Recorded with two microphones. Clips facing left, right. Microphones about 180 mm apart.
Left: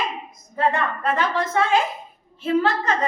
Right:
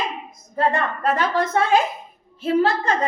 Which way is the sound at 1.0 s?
40° right (ahead or behind).